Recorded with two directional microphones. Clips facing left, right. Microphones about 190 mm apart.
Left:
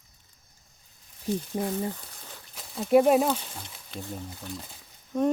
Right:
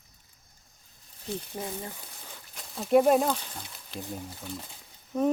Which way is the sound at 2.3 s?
Centre (ahead or behind).